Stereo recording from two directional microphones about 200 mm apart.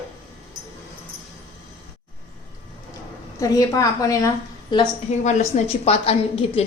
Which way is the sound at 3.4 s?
15° left (ahead or behind).